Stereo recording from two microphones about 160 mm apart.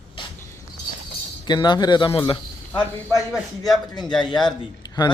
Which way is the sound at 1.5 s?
25° left (ahead or behind).